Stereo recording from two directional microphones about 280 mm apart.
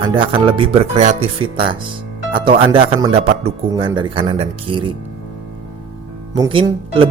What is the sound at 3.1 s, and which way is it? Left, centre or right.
Speech, right.